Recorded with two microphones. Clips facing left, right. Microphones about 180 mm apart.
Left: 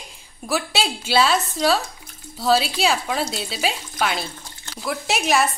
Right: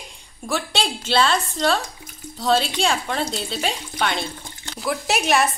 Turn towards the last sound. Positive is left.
turn(degrees=0)  # may be behind; listen again after turning